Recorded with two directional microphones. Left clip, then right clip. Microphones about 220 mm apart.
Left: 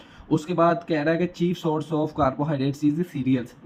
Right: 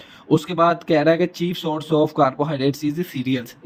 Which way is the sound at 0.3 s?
40° right (ahead or behind).